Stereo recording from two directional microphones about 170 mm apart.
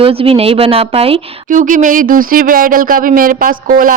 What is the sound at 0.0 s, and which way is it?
A woman's voice, 35° right (ahead or behind).